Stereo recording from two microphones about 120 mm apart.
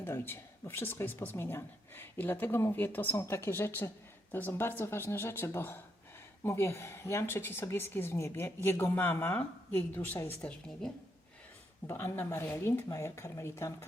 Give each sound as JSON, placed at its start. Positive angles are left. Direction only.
{"t": 0.0, "sound": "a woman's voice", "side_deg": 20}
{"t": 10.4, "sound": "a woman's voice", "side_deg": 5}
{"t": 11.9, "sound": "a woman's voice", "side_deg": 15}